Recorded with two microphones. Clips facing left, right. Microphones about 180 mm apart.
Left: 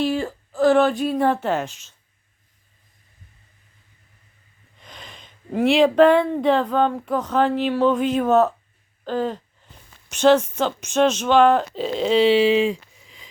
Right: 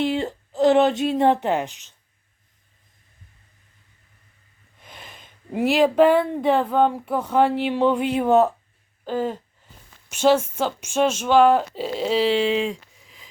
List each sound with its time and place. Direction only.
0.0 s a woman's voice: 20° right (ahead or behind)
4.8 s speech: 10° right (ahead or behind)